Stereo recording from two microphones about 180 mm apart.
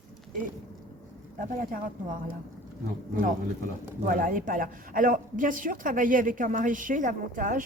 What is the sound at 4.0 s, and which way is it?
Speech, 50° right (ahead or behind).